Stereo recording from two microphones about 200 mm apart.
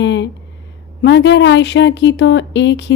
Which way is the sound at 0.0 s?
65° left (ahead or behind).